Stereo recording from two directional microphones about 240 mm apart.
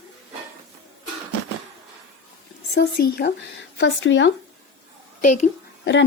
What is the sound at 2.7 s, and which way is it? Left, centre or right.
A woman's voice, left.